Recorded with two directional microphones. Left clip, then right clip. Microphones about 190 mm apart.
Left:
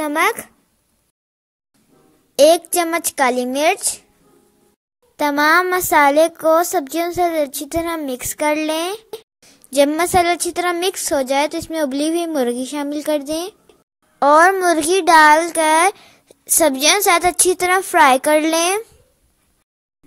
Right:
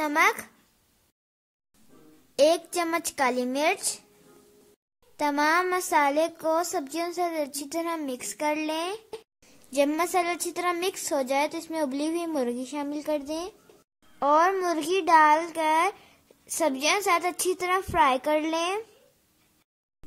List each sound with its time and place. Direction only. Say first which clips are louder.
0.0 s a woman's voice: left 5 dB; 15° left (ahead or behind)
2.3 s a woman's voice: left 10 dB; 15° left (ahead or behind)
5.1 s a woman's voice: left 9 dB; 20° left (ahead or behind)